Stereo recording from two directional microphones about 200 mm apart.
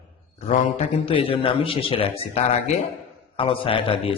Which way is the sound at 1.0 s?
25° left (ahead or behind).